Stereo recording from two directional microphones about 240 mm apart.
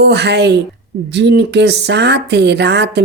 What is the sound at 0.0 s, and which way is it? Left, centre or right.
Speech, right.